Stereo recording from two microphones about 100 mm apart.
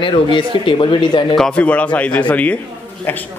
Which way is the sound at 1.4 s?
10° left (ahead or behind).